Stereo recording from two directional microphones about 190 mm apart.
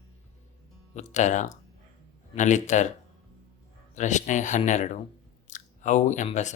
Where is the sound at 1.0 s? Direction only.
35° left (ahead or behind).